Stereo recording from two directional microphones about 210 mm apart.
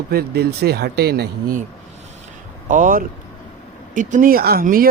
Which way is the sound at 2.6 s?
40° right (ahead or behind).